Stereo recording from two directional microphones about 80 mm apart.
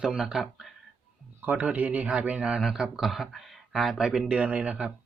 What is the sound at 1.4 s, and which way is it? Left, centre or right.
Speech, centre.